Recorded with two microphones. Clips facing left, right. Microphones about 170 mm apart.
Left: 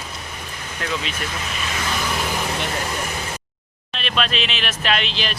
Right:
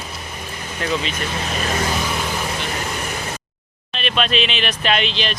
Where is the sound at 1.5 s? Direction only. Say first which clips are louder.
Right 6 dB; 45° right (ahead or behind).